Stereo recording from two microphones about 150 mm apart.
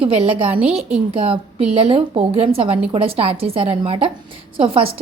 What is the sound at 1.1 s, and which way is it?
A woman's voice, 40° right (ahead or behind).